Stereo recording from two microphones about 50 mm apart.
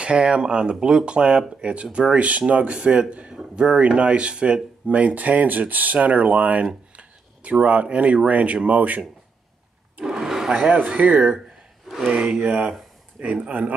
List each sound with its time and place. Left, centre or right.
0.0 s speech: right
10.0 s a sound: centre
10.5 s speech: right
13.2 s speech: right